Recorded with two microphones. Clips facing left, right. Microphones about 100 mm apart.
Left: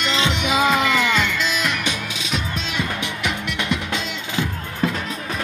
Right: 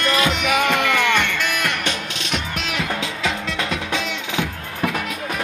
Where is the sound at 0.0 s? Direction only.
20° left (ahead or behind).